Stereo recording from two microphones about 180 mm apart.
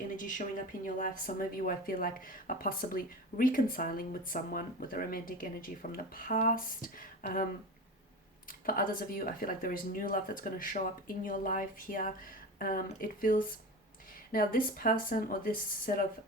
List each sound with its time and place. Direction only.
0.2 s speech: 45° left (ahead or behind)
8.6 s speech: 50° left (ahead or behind)